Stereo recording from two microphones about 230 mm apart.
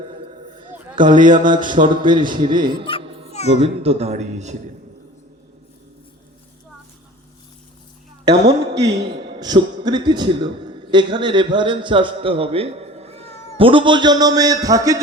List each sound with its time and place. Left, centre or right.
0.5 s a sound: right
0.9 s a man's voice: right
1.8 s a man's voice: right
8.3 s a man's voice: centre